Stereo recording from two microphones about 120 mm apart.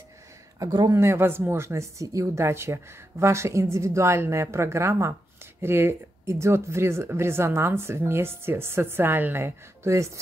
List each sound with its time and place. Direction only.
0.6 s speech: 30° right (ahead or behind)